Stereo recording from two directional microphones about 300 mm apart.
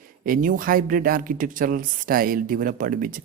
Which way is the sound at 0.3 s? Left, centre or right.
Right.